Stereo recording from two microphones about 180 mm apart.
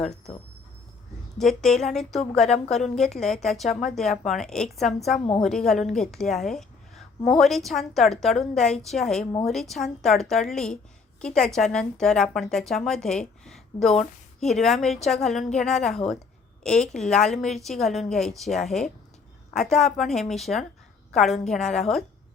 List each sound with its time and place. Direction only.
1.4 s a woman's voice: centre (ahead or behind)